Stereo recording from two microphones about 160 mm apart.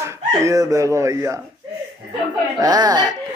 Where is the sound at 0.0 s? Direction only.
15° right (ahead or behind).